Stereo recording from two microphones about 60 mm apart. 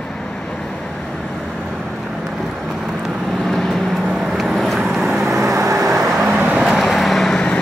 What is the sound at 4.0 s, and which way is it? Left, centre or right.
Vehicle, centre.